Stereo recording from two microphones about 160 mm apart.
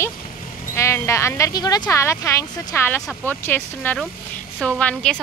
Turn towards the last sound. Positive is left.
turn(degrees=5)  # may be behind; listen again after turning